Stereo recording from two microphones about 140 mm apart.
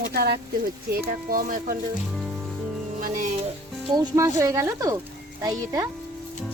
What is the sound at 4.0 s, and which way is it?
Speech, 20° right (ahead or behind).